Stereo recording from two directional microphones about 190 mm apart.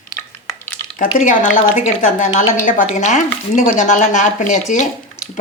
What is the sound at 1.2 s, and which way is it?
Speech, 40° left (ahead or behind).